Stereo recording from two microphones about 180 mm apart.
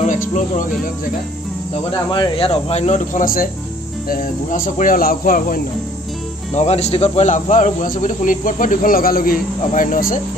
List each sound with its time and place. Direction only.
0.0 s speech: 45° left (ahead or behind)
2.1 s speech: 30° left (ahead or behind); by 5.6 s 50° left (ahead or behind)
6.5 s speech: 40° left (ahead or behind)